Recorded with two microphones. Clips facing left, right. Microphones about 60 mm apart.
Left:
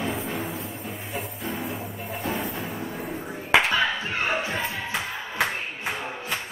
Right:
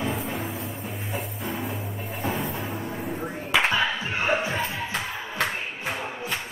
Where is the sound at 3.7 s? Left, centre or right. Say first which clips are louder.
Left 1 dB; centre.